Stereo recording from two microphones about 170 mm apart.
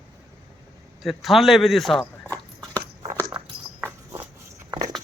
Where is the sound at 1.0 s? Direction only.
Centre (ahead or behind).